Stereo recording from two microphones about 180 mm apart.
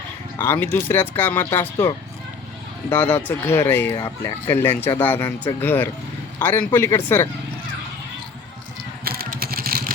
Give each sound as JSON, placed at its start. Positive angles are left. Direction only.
{"t": 0.3, "sound": "speech", "side_deg": 15}
{"t": 2.9, "sound": "speech", "side_deg": 10}
{"t": 9.0, "sound": "vehicle", "side_deg": -55}